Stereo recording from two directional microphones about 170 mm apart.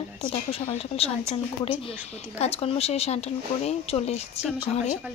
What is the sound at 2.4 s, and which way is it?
A woman's voice, 35° left (ahead or behind).